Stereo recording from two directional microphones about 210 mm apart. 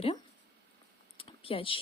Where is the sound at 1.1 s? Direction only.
25° left (ahead or behind).